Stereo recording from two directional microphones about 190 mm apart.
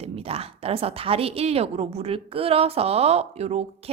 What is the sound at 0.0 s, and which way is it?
Speech, 30° right (ahead or behind).